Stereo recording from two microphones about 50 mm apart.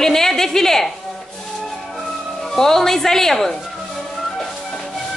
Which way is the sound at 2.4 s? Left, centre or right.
Centre.